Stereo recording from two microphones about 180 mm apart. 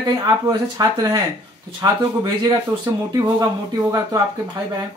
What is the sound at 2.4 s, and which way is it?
Speech, 20° right (ahead or behind).